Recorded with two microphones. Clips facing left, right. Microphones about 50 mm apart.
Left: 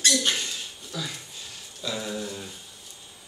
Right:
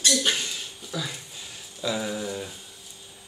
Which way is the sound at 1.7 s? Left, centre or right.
Centre.